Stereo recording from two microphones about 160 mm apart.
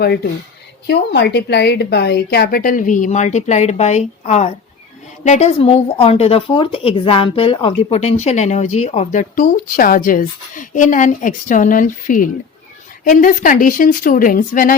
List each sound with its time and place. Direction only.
0.9 s a woman's voice: 90° left; by 14.8 s 60° left (ahead or behind)